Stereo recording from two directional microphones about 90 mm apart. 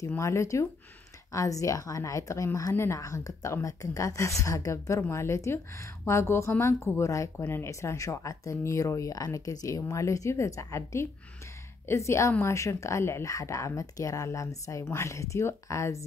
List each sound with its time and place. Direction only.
0.2 s a woman's voice: 35° left (ahead or behind)